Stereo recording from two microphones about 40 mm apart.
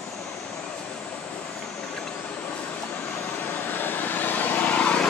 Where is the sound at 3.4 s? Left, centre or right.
Left.